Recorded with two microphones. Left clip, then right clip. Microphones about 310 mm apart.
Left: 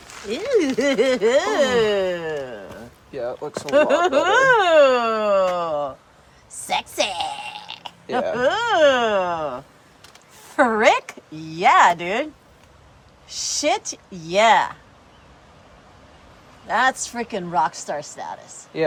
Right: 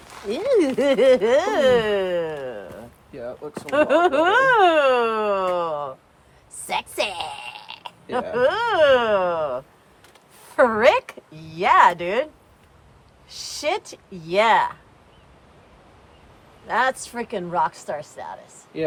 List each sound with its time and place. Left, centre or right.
0.1 s speech: centre
3.2 s speech: left
3.8 s speech: centre
6.7 s fart: centre
8.1 s speech: centre
16.6 s speech: centre